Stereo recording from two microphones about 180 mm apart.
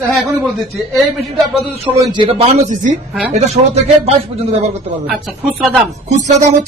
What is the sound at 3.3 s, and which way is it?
Speech, 35° right (ahead or behind).